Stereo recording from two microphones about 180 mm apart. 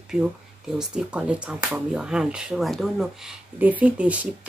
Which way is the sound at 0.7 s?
5° right (ahead or behind).